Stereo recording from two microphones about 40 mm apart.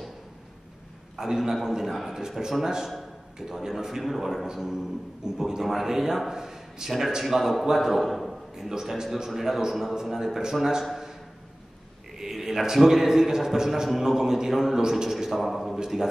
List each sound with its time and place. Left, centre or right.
1.1 s a man's voice: centre
2.1 s a man's voice: centre
5.6 s a man's voice: centre
7.2 s a man's voice: centre
8.6 s a man's voice: centre
12.2 s a man's voice: centre